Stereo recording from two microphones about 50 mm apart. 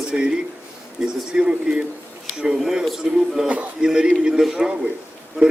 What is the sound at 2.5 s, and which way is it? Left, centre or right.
A man's voice, centre.